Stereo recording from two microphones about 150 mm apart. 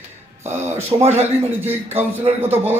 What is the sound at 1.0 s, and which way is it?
Speech, 45° right (ahead or behind).